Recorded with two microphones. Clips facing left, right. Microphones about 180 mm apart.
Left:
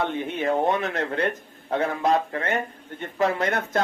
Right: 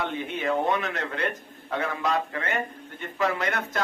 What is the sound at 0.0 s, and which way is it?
A man's voice, 25° left (ahead or behind).